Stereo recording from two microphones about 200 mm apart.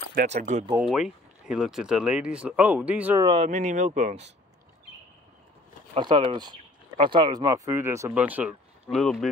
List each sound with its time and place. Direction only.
0.1 s speech: 40° right (ahead or behind)
0.7 s speech: 5° right (ahead or behind)
3.4 s speech: 35° right (ahead or behind)
5.9 s speech: 25° right (ahead or behind); by 9.3 s centre (ahead or behind)